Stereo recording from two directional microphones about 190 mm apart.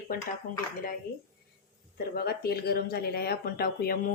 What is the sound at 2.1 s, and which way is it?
Speech, 55° left (ahead or behind).